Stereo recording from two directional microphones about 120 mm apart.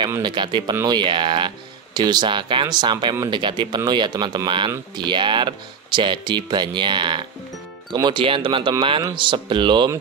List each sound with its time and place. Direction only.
0.2 s speech: 40° right (ahead or behind)